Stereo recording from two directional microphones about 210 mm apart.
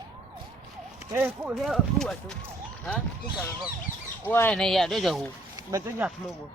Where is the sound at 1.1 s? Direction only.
10° right (ahead or behind).